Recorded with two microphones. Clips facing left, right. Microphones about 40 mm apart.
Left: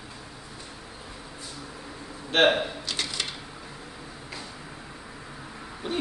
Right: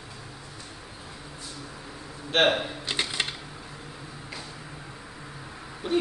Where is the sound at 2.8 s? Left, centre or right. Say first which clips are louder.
Right 2 dB; right.